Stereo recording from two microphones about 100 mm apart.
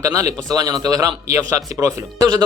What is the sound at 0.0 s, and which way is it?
Speech, 30° right (ahead or behind).